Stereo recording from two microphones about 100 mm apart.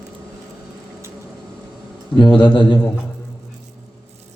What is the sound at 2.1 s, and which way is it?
Speech, 55° left (ahead or behind).